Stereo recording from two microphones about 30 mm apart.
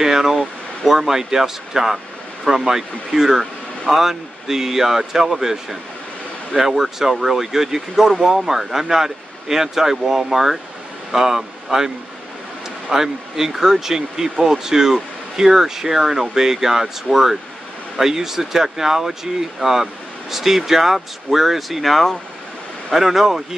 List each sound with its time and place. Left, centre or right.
0.0 s air conditioning: centre
0.8 s speech: centre
2.5 s speech: centre
3.1 s speech: centre
12.9 s speech: centre
22.9 s speech: centre